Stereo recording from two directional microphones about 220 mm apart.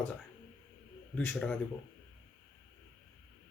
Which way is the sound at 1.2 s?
5° left (ahead or behind).